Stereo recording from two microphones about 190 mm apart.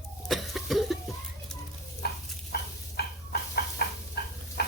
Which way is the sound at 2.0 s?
60° left (ahead or behind).